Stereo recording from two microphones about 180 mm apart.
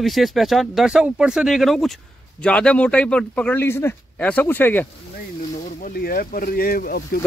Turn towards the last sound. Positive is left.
turn(degrees=55)  # may be behind; listen again after turning